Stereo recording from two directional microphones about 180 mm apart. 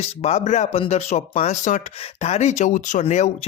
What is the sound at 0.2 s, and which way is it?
Speech, 40° left (ahead or behind).